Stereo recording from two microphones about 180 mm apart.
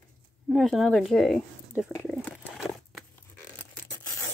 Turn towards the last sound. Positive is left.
turn(degrees=0)  # may be behind; listen again after turning